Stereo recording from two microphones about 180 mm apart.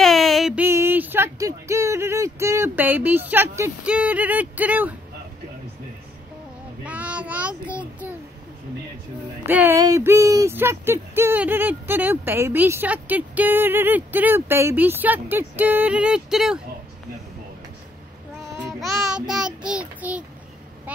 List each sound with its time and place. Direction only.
0.0 s a sound: centre (ahead or behind)
0.7 s speech: 15° right (ahead or behind)
6.8 s speech: 5° right (ahead or behind)
9.5 s speech: 10° right (ahead or behind)
18.4 s child singing: 15° right (ahead or behind)
18.8 s a child's voice: centre (ahead or behind)